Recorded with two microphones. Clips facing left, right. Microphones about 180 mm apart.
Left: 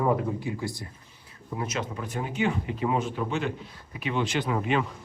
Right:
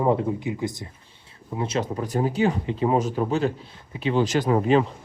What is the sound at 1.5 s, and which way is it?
Speech, 30° right (ahead or behind).